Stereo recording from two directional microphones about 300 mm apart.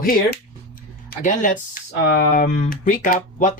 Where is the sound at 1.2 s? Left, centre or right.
Left.